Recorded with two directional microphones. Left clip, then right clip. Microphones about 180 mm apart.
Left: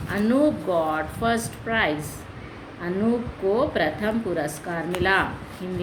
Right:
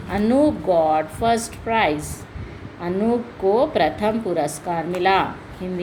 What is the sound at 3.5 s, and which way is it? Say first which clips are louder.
Speech: right 4 dB; 20° right (ahead or behind).